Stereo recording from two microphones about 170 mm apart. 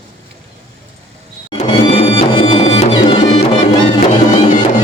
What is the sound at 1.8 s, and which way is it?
Music, 30° left (ahead or behind).